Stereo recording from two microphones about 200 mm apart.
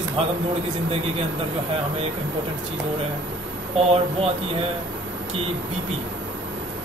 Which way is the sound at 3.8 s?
30° right (ahead or behind).